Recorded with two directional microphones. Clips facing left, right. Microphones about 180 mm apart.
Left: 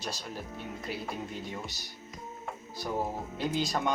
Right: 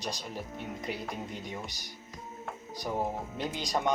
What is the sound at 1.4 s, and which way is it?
Speech, 20° right (ahead or behind).